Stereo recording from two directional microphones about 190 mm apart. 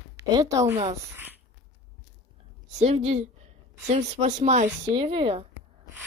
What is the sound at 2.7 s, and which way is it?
Speech, 35° right (ahead or behind).